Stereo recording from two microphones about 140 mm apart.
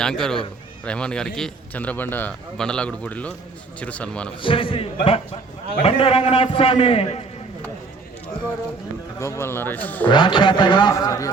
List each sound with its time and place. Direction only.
0.0 s a man's voice: 5° left (ahead or behind)
4.4 s a man's voice: 40° left (ahead or behind)
9.1 s a man's voice: 20° left (ahead or behind)
10.1 s a man's voice: 35° left (ahead or behind)